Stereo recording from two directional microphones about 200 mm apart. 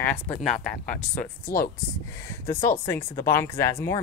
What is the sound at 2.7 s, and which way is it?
Speech, 10° left (ahead or behind).